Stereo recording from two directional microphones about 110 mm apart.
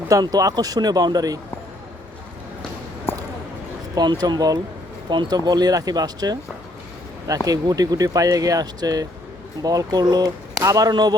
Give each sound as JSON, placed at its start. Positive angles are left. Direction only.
{"t": 0.1, "sound": "speech", "side_deg": -35}
{"t": 3.9, "sound": "speech", "side_deg": -40}
{"t": 7.4, "sound": "speech", "side_deg": -35}